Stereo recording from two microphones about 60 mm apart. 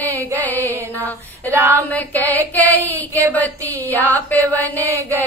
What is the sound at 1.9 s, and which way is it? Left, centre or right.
Child singing, left.